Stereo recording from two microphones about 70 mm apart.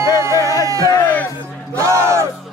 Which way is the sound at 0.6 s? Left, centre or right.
Right.